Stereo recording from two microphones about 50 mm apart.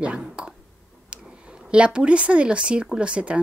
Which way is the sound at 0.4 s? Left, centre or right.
Right.